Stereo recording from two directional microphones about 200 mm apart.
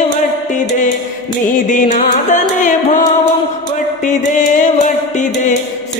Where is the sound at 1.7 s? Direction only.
40° left (ahead or behind).